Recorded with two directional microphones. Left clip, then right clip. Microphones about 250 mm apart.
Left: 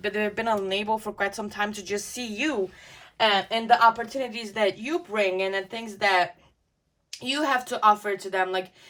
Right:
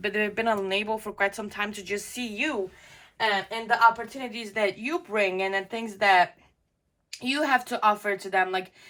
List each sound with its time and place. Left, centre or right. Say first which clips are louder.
0.0 s speech: right 1 dB; centre
3.3 s speech: left 5 dB; left
4.2 s speech: left 2 dB; centre